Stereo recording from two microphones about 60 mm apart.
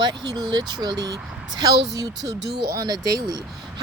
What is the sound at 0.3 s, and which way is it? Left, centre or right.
Speech, right.